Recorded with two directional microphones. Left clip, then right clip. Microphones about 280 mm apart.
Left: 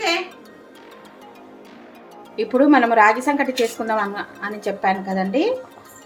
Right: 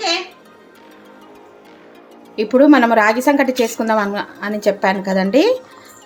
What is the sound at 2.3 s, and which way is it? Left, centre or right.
A woman's voice, centre.